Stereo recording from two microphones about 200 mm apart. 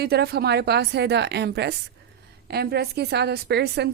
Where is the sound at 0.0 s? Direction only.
55° right (ahead or behind).